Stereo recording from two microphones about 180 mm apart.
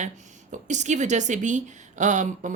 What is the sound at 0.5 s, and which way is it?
A woman's voice, 40° right (ahead or behind).